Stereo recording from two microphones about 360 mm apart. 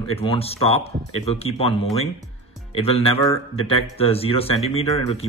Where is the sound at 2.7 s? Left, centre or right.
Centre.